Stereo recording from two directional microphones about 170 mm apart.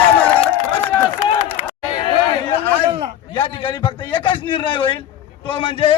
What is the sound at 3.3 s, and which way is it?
A man's voice, 30° left (ahead or behind).